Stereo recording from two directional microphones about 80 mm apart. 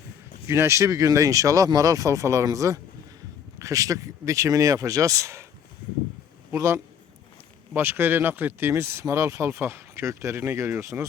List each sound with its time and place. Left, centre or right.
0.4 s speech: right
6.5 s speech: right
7.7 s speech: right